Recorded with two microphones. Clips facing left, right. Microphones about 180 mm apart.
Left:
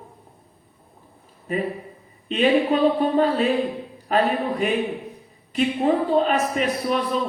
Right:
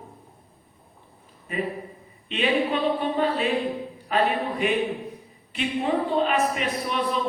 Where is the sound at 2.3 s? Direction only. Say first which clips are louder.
Left 5 dB; 40° left (ahead or behind).